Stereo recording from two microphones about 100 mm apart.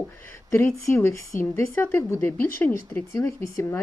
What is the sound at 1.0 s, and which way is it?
Speech, 30° left (ahead or behind).